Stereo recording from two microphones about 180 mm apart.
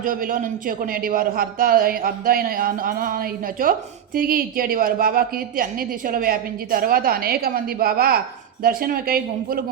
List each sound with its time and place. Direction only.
0.0 s a man's voice: 50° right (ahead or behind)